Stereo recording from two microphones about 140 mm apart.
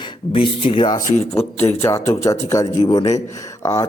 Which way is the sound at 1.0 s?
65° left (ahead or behind).